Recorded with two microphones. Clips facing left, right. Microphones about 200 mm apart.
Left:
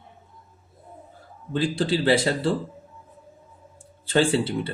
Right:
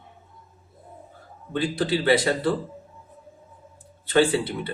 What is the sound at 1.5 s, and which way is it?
Speech, 30° left (ahead or behind).